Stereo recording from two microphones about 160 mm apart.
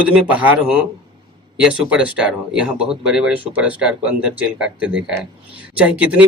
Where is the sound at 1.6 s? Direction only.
5° right (ahead or behind).